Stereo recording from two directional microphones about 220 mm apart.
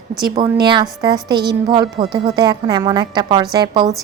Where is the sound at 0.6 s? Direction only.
20° right (ahead or behind).